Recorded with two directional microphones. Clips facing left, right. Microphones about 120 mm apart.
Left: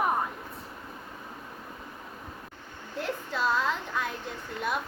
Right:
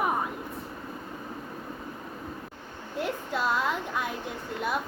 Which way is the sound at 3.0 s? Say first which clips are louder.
Right 1 dB; 10° right (ahead or behind).